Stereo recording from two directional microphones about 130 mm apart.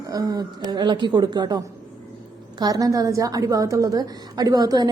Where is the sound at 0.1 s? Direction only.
30° right (ahead or behind).